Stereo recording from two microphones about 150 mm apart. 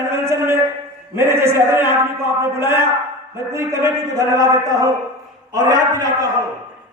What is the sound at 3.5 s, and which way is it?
Speech, 20° right (ahead or behind).